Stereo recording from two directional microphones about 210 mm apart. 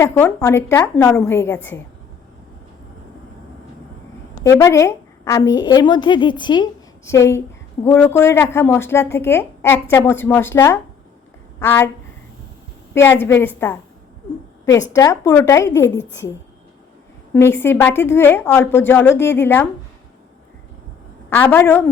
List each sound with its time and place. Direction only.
0.0 s a woman's voice: 10° left (ahead or behind)
4.4 s a woman's voice: 15° left (ahead or behind)
12.9 s a woman's voice: 10° left (ahead or behind)
17.3 s a woman's voice: 10° left (ahead or behind)
21.2 s a woman's voice: 10° left (ahead or behind)